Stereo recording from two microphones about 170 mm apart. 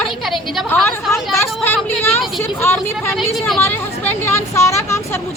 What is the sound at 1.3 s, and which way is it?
Speech, 15° left (ahead or behind).